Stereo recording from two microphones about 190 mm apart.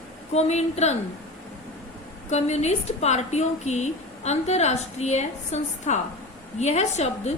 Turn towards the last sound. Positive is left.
turn(degrees=35)  # may be behind; listen again after turning